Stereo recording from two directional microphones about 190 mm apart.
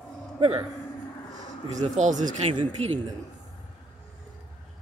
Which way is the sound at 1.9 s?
40° right (ahead or behind).